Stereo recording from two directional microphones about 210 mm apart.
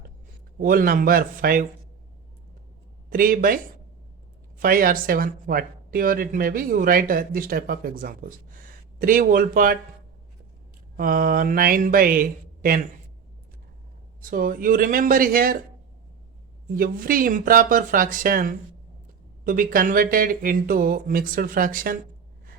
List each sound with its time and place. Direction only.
0.6 s speech: 40° right (ahead or behind)
3.1 s speech: 40° right (ahead or behind)
4.6 s speech: 40° right (ahead or behind)
10.9 s speech: 45° right (ahead or behind)
14.2 s speech: 40° right (ahead or behind)
16.7 s speech: 45° right (ahead or behind)